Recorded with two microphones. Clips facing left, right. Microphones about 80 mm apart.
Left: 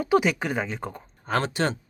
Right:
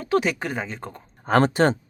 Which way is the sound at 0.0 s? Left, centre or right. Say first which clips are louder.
Left 1 dB; centre.